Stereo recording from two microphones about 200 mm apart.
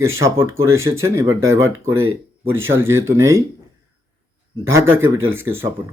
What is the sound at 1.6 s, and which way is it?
Speech, 90° right.